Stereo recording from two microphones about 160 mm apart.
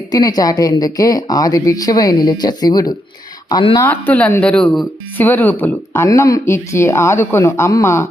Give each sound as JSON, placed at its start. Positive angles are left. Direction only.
{"t": 0.1, "sound": "a woman's voice", "side_deg": 25}
{"t": 3.8, "sound": "speech", "side_deg": 10}